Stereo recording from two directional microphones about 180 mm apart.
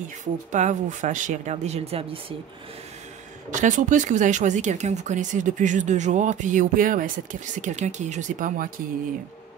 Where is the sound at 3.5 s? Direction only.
45° right (ahead or behind).